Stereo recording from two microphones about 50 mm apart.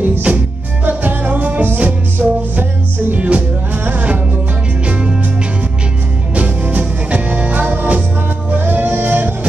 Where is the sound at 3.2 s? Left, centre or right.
Right.